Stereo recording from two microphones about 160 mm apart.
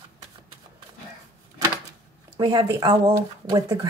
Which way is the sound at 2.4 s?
25° right (ahead or behind).